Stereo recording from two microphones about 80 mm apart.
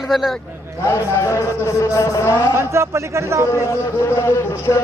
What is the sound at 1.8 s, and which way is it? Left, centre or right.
Vehicle, left.